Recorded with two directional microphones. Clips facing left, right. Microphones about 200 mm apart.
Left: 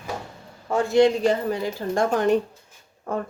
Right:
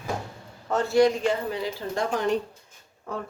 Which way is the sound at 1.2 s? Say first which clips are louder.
Left 4 dB; 45° left (ahead or behind).